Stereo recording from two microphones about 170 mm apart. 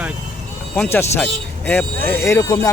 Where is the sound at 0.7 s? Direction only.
10° left (ahead or behind).